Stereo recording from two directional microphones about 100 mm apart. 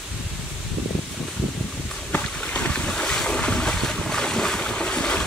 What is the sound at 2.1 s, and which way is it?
Boat, 15° left (ahead or behind).